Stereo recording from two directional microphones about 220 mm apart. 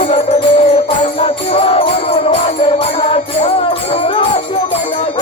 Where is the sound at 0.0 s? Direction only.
30° left (ahead or behind).